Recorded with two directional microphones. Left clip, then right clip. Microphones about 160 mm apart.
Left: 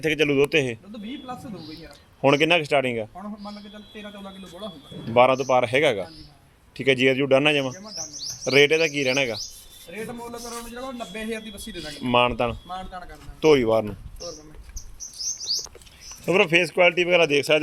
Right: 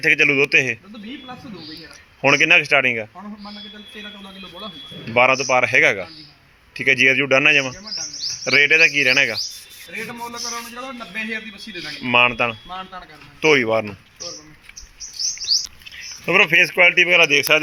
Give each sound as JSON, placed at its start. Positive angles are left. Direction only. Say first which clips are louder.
{"t": 0.0, "sound": "a man's voice", "louder": "right 6 dB", "side_deg": 15}
{"t": 2.2, "sound": "a man's voice", "louder": "right 5 dB", "side_deg": 15}
{"t": 5.1, "sound": "a man's voice", "louder": "right 2 dB", "side_deg": 15}
{"t": 11.0, "sound": "a man's voice", "louder": "right 8 dB", "side_deg": 15}
{"t": 16.2, "sound": "speech", "louder": "right 5 dB", "side_deg": 5}